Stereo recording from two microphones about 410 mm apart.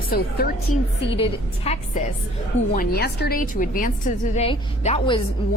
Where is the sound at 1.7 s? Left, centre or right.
Centre.